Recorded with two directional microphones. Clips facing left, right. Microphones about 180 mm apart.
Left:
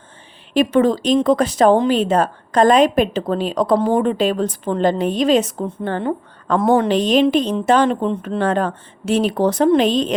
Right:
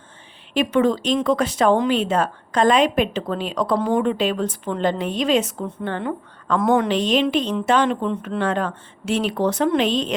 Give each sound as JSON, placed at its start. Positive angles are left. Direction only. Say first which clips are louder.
{"t": 0.5, "sound": "speech", "louder": "left 3 dB", "side_deg": 40}